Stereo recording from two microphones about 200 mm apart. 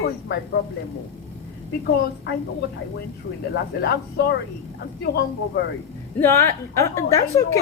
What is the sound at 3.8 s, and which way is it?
Speech, 50° left (ahead or behind).